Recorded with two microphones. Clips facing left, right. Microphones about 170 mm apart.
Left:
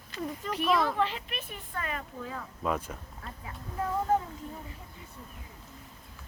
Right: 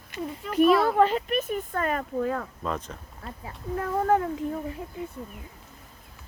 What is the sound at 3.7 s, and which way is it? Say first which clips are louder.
Speech: right 5 dB; 65° right (ahead or behind).